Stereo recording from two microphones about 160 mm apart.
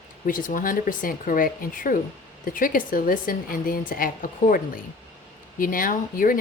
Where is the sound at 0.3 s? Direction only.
55° left (ahead or behind).